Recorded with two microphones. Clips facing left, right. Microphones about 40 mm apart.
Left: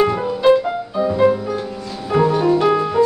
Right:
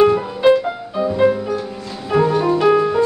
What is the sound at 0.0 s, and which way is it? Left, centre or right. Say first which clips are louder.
Music: right 3 dB; centre.